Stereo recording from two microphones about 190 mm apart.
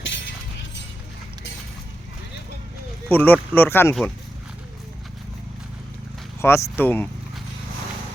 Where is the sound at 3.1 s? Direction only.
10° left (ahead or behind).